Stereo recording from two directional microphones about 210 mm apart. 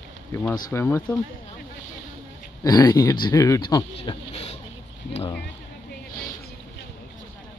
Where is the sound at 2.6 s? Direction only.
15° left (ahead or behind).